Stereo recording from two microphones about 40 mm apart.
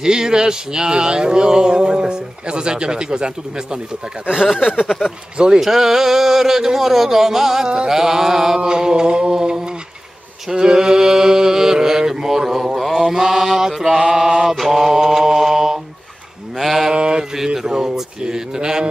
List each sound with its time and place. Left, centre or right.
0.0 s speech: centre
4.6 s speech: centre
10.5 s mantra: centre
13.0 s mantra: centre
16.5 s sheep: centre
16.9 s mantra: right
17.6 s a sound: centre